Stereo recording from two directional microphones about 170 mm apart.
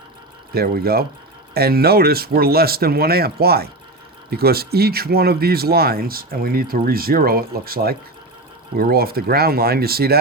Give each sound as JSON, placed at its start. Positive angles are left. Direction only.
{"t": 0.5, "sound": "speech", "side_deg": -65}